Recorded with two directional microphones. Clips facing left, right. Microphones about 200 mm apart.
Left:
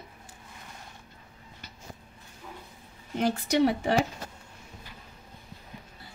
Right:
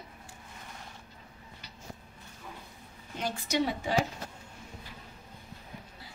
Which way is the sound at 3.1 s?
60° left (ahead or behind).